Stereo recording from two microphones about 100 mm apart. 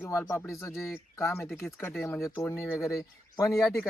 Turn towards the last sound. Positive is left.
turn(degrees=0)  # may be behind; listen again after turning